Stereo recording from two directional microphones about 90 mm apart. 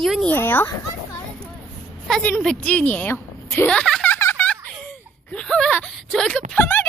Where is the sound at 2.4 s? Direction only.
10° left (ahead or behind).